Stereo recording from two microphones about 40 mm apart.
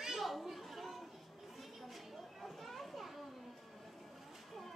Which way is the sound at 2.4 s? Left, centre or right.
Centre.